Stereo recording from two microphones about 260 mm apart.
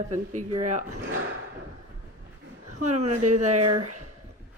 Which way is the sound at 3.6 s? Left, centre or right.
Right.